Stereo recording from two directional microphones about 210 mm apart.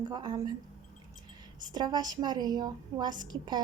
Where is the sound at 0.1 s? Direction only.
20° right (ahead or behind).